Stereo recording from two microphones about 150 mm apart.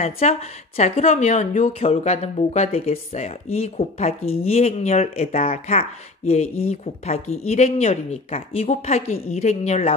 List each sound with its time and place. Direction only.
0.0 s speech: 45° left (ahead or behind)